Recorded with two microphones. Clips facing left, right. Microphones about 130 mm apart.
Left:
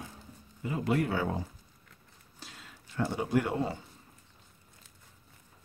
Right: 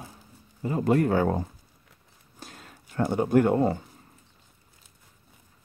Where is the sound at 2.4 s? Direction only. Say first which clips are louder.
Right 5 dB; 45° right (ahead or behind).